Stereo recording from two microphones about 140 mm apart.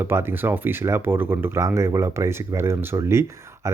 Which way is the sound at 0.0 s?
15° right (ahead or behind).